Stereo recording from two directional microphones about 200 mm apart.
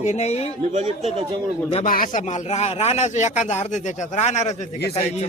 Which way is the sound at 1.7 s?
30° left (ahead or behind).